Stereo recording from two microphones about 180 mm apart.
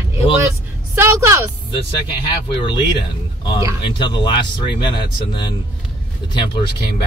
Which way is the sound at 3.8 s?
25° left (ahead or behind).